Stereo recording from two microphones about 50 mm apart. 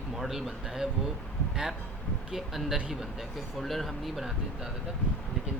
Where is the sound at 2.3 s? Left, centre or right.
Centre.